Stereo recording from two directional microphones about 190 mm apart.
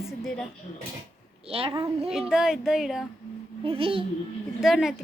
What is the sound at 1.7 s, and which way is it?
Speech, 30° right (ahead or behind).